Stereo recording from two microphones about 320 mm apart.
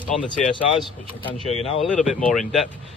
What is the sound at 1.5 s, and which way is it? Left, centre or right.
Speech, centre.